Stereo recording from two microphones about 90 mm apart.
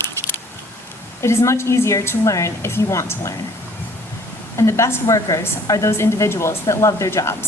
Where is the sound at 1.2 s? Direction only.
30° left (ahead or behind).